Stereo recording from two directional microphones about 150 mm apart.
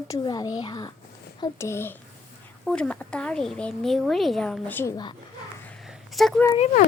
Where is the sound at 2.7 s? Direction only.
5° left (ahead or behind).